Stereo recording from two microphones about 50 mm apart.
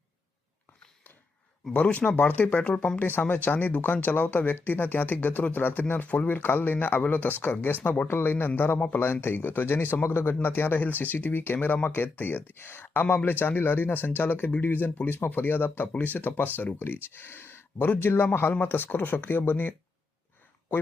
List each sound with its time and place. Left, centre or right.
1.7 s speech: left
3.0 s speech: left
7.8 s speech: left
8.0 s a man's voice: left